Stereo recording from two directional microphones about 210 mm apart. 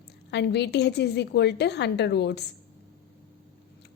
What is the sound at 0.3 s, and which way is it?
A woman's voice, 55° left (ahead or behind).